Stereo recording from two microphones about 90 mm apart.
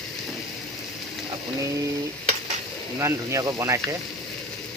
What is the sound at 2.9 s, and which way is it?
Stir, 30° right (ahead or behind).